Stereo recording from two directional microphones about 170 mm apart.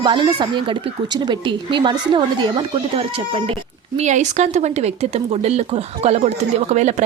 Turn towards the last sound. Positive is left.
turn(degrees=-40)  # may be behind; listen again after turning